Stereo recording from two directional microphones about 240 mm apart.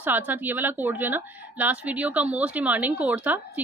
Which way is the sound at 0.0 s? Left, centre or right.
Centre.